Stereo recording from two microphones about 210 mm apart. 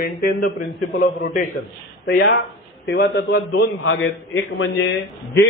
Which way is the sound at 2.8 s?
55° left (ahead or behind).